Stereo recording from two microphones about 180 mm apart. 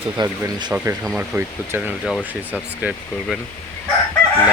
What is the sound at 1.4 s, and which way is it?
Speech, 10° right (ahead or behind).